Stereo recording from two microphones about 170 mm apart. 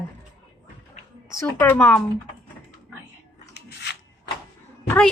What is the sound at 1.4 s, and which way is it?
Speech, 10° left (ahead or behind).